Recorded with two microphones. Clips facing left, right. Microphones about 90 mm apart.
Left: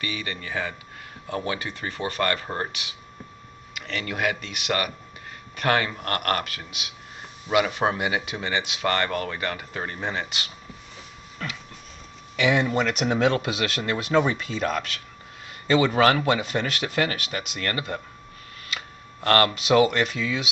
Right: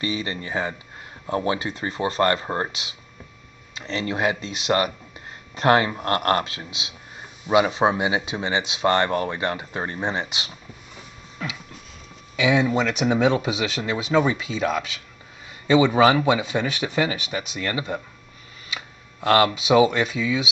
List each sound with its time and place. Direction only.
0.0 s speech: 25° right (ahead or behind)
11.4 s a sound: 5° right (ahead or behind)
12.4 s speech: 15° right (ahead or behind)